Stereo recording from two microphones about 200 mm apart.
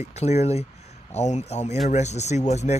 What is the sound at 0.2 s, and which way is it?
Speech, 35° left (ahead or behind).